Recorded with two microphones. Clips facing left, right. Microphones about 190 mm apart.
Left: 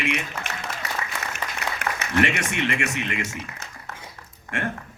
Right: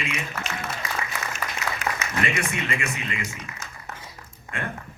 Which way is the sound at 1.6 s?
60° left (ahead or behind).